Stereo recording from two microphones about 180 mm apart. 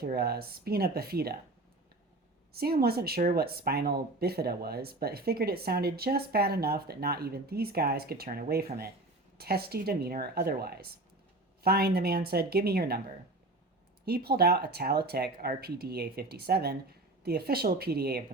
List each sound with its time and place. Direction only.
0.0 s speech: 55° right (ahead or behind)
2.5 s speech: 60° right (ahead or behind)
14.0 s speech: 60° right (ahead or behind)